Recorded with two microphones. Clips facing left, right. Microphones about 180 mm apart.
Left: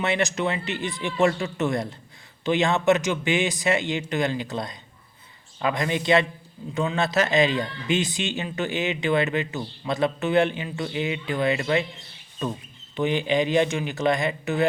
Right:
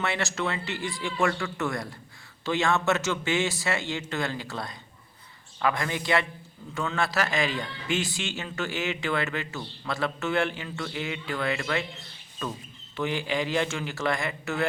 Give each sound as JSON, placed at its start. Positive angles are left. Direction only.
{"t": 0.0, "sound": "a man's voice", "side_deg": 20}
{"t": 13.0, "sound": "speech", "side_deg": 20}